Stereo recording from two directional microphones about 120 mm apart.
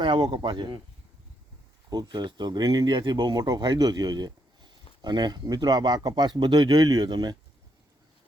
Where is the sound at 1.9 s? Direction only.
35° right (ahead or behind).